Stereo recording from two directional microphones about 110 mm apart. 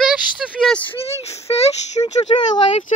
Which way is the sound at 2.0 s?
45° left (ahead or behind).